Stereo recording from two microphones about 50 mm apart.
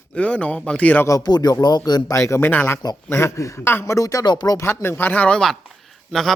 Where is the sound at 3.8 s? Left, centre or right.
Left.